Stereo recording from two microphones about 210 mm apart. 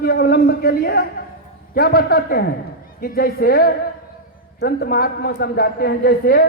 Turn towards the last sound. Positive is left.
turn(degrees=45)  # may be behind; listen again after turning